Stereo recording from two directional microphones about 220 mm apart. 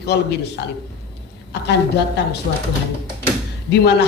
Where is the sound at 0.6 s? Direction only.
45° left (ahead or behind).